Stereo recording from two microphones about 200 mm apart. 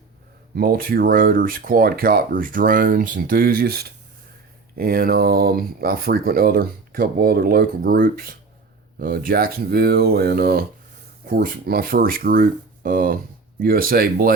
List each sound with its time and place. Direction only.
0.5 s speech: 50° right (ahead or behind)